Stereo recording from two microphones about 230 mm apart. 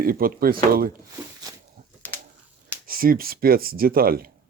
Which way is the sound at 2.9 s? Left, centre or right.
Right.